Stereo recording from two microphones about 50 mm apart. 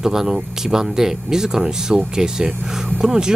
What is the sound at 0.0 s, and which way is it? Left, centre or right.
Speech, centre.